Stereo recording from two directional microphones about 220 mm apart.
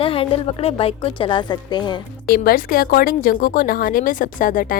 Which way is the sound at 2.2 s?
40° left (ahead or behind).